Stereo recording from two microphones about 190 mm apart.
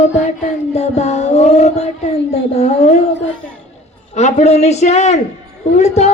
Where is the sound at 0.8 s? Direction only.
35° left (ahead or behind).